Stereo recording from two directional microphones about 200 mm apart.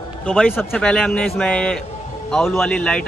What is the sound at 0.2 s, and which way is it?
A man's voice, 5° left (ahead or behind).